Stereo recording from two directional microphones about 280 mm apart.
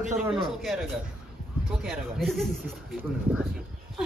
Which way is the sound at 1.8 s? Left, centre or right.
Centre.